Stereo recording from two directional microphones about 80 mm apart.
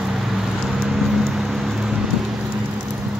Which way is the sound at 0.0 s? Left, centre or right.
Centre.